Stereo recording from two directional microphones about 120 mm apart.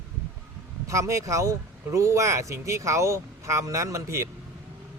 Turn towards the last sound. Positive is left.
turn(degrees=-25)  # may be behind; listen again after turning